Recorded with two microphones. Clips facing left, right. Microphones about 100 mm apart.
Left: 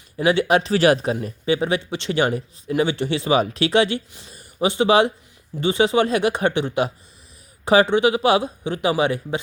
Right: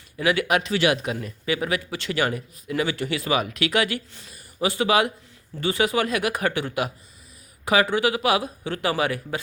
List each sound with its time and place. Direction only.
0.2 s speech: 30° left (ahead or behind)